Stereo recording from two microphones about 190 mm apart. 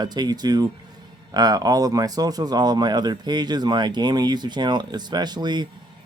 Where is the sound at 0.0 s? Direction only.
20° right (ahead or behind).